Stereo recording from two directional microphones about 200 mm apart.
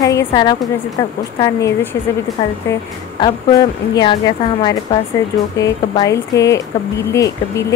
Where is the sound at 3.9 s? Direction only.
20° left (ahead or behind).